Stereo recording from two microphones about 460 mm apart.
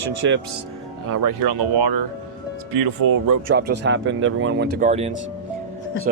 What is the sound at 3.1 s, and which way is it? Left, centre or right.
Speech, right.